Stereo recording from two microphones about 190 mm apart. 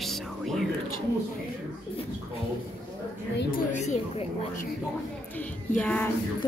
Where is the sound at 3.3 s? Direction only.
45° left (ahead or behind).